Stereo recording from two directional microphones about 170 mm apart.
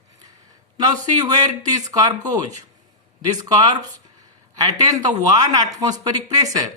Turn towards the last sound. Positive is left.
turn(degrees=-20)  # may be behind; listen again after turning